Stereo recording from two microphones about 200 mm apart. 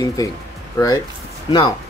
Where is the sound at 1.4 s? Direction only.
25° left (ahead or behind).